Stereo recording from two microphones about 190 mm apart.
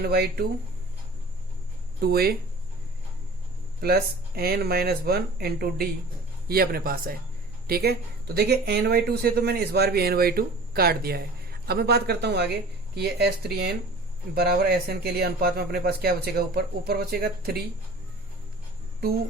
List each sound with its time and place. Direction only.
0.0 s a man's voice: 55° right (ahead or behind)
2.0 s a man's voice: 55° right (ahead or behind)
3.8 s a man's voice: 55° right (ahead or behind)